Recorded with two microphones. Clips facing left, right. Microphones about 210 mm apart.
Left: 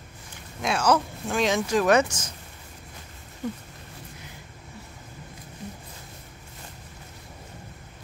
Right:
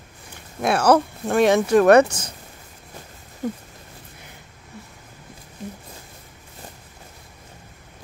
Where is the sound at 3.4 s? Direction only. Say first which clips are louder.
Right 4 dB; 45° right (ahead or behind).